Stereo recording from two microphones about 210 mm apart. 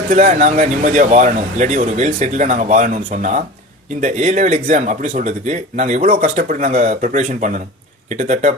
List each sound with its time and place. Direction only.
0.1 s speech: 35° right (ahead or behind)